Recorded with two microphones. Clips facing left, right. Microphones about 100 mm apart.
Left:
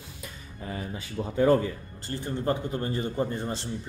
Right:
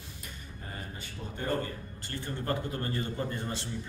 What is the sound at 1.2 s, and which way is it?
Speech, 90° left.